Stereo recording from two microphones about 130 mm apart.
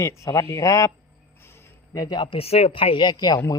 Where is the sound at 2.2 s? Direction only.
45° left (ahead or behind).